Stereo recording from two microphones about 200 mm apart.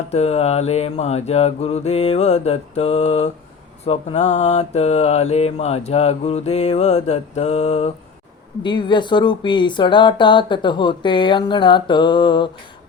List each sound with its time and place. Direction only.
0.1 s mantra: 30° left (ahead or behind)
8.6 s speech: 25° left (ahead or behind)